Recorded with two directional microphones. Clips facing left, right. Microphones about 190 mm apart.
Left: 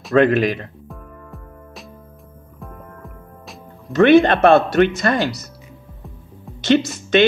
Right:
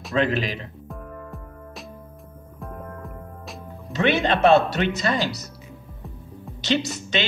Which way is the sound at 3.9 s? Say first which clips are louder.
Left 10 dB; 55° left (ahead or behind).